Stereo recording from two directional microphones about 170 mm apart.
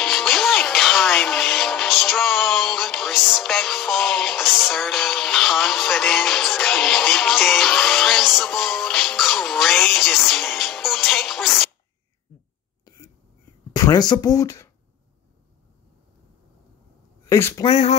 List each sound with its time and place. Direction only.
0.0 s music: centre (ahead or behind)
12.8 s a sound: 20° left (ahead or behind)
13.7 s speech: 25° left (ahead or behind)
17.3 s speech: 15° left (ahead or behind)
17.6 s speech: 40° left (ahead or behind)